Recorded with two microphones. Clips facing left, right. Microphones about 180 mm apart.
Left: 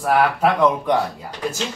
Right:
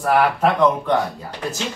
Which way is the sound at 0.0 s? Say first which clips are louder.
Even; 10° left (ahead or behind).